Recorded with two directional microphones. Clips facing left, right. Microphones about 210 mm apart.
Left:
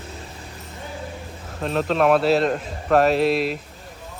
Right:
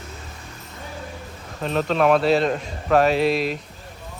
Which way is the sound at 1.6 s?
Centre (ahead or behind).